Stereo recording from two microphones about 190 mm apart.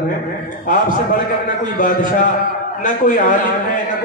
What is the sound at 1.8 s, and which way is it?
A man's voice, 45° left (ahead or behind).